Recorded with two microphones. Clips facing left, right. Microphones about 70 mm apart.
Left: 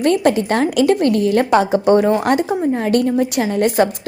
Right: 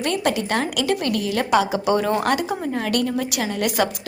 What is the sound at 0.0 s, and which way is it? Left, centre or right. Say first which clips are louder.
A woman's voice: left 7 dB; left.